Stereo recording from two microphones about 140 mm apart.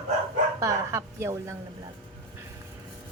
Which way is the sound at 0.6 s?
20° right (ahead or behind).